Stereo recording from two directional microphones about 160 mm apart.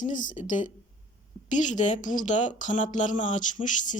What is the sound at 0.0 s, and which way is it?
A woman's voice, 55° left (ahead or behind).